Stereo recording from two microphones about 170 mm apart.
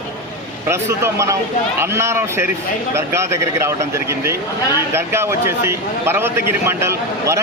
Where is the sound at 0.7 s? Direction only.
15° right (ahead or behind).